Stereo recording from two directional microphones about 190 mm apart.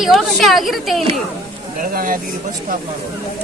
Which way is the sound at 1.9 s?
50° right (ahead or behind).